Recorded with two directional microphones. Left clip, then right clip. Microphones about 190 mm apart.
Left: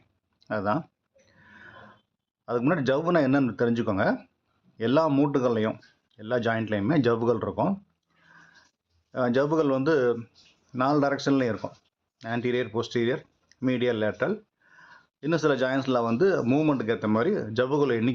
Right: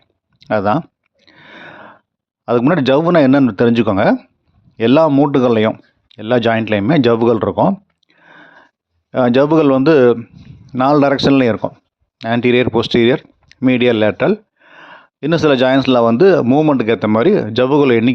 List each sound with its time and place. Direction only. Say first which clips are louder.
0.3 s speech: right 13 dB; 40° right (ahead or behind)
1.3 s gasp: right 14 dB; 45° right (ahead or behind)
2.4 s speech: right 12 dB; 45° right (ahead or behind)
5.0 s speech: right 12 dB; 25° right (ahead or behind)
5.3 s speech: right 12 dB; 45° right (ahead or behind)
7.7 s a sound: right 12 dB; 40° right (ahead or behind)
9.1 s speech: right 12 dB; 40° right (ahead or behind)
16.5 s speech: right 12 dB; 25° right (ahead or behind)
16.7 s speech: right 12 dB; 45° right (ahead or behind)